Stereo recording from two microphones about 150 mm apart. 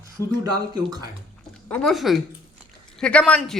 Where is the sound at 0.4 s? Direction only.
25° right (ahead or behind).